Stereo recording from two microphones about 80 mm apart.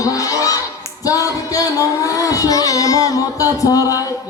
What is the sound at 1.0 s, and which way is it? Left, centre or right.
Child singing, left.